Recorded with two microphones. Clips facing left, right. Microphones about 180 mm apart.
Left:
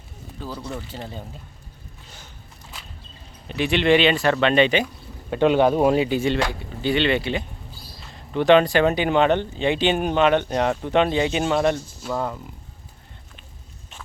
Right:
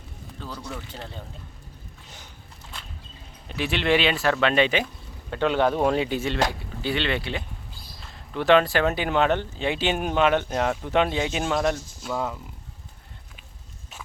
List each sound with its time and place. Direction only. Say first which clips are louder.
0.4 s speech: left 4 dB; 10° left (ahead or behind)
3.5 s speech: left 5 dB; centre (ahead or behind)
5.3 s speech: left 5 dB; 15° left (ahead or behind); by 12.4 s centre (ahead or behind)